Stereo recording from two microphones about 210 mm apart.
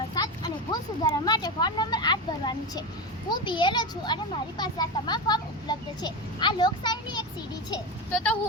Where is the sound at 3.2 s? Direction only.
20° left (ahead or behind).